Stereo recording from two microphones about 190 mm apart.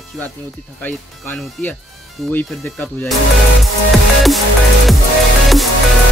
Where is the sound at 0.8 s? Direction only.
5° left (ahead or behind).